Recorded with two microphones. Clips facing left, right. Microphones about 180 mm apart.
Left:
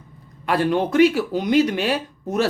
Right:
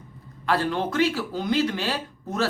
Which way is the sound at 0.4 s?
15° left (ahead or behind).